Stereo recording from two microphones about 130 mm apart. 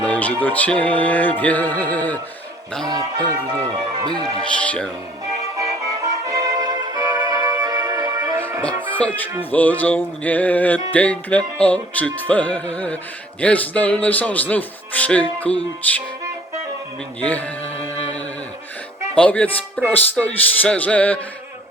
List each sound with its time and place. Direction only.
0.0 s music: 10° left (ahead or behind)
0.4 s a man's voice: 10° left (ahead or behind)
2.8 s speech: 30° right (ahead or behind)
4.6 s a man's voice: 10° left (ahead or behind)
6.2 s music: 25° right (ahead or behind)
8.9 s music: 10° left (ahead or behind)
9.5 s a man's voice: 10° left (ahead or behind)
17.2 s a man's voice: 10° left (ahead or behind)
19.1 s a man's voice: 10° left (ahead or behind)